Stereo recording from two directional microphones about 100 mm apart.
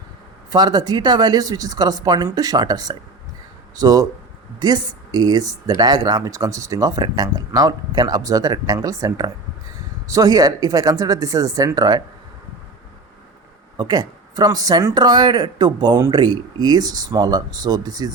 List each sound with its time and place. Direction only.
0.5 s speech: 45° right (ahead or behind)
13.7 s speech: 45° right (ahead or behind)